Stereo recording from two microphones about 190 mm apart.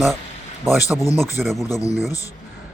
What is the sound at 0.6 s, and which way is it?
Speech, centre (ahead or behind).